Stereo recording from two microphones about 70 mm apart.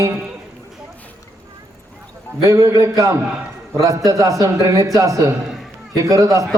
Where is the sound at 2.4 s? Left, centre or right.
Right.